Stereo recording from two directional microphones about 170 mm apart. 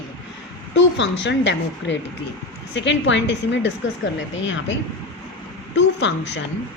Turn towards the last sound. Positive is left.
turn(degrees=90)